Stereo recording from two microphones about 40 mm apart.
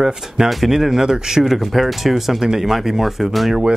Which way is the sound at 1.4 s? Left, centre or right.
Centre.